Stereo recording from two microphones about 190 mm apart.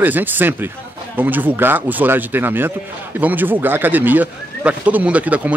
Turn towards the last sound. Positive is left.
turn(degrees=-5)  # may be behind; listen again after turning